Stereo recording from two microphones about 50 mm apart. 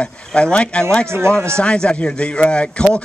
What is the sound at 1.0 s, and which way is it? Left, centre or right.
Speech, right.